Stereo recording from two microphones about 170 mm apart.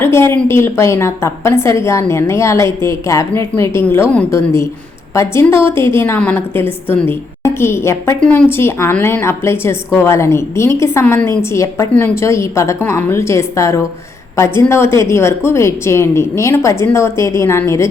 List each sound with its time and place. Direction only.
0.0 s a woman's voice: 15° left (ahead or behind)